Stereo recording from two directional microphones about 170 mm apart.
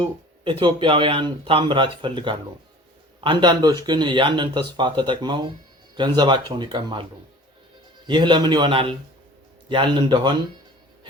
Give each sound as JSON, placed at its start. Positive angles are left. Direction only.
{"t": 0.6, "sound": "speech", "side_deg": -30}